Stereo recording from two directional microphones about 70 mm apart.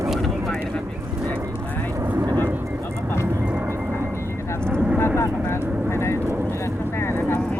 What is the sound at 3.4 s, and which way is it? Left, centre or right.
Music, centre.